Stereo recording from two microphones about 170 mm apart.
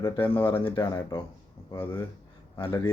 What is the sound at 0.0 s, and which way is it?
Speech, 30° left (ahead or behind).